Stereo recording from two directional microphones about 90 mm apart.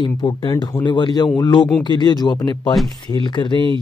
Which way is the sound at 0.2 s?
55° left (ahead or behind).